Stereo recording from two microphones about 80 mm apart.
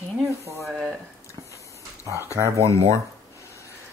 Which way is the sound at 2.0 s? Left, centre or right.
Right.